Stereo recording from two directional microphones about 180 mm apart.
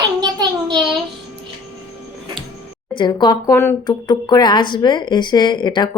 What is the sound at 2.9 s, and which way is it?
Speech, 25° left (ahead or behind).